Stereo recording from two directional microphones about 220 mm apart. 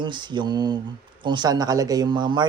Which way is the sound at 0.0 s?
20° right (ahead or behind).